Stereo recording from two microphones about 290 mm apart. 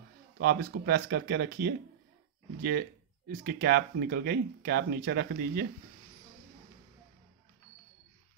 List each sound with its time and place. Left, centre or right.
0.4 s speech: right
3.3 s speech: right